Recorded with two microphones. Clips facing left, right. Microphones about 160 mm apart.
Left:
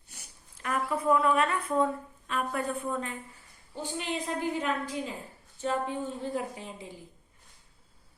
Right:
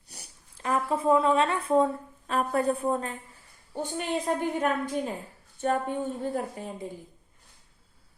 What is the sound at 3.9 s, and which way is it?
A woman's voice, 50° right (ahead or behind).